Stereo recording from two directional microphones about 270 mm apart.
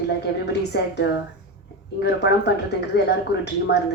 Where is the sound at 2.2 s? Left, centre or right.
Left.